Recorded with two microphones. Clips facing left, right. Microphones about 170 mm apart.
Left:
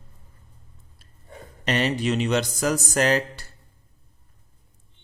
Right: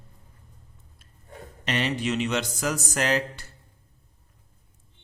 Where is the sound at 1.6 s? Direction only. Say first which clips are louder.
Left 3 dB; 40° left (ahead or behind).